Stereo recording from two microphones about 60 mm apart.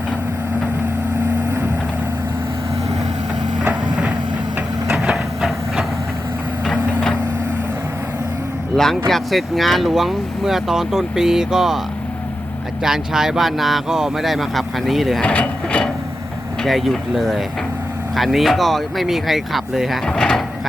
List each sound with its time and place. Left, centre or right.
5.1 s train: centre
8.7 s speech: centre
12.8 s speech: centre
15.2 s speech: left
16.6 s speech: centre
20.1 s speech: centre